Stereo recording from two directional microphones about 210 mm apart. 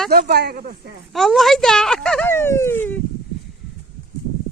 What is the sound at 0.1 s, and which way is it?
Speech, 50° right (ahead or behind).